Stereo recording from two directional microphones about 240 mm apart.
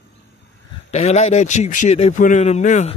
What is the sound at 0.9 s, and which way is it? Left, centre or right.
A man's voice, left.